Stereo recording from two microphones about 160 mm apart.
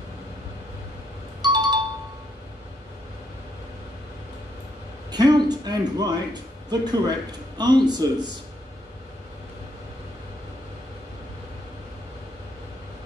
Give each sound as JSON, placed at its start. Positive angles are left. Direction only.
{"t": 1.4, "sound": "doorbell", "side_deg": -25}
{"t": 5.1, "sound": "a man's voice", "side_deg": -25}